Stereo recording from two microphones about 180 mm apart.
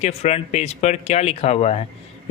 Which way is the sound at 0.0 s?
35° left (ahead or behind).